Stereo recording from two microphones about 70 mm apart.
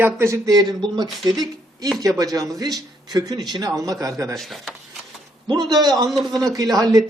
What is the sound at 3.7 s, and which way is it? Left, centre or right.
Speech, right.